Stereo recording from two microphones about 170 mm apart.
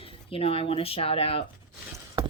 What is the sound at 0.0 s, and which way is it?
Speech, 35° left (ahead or behind).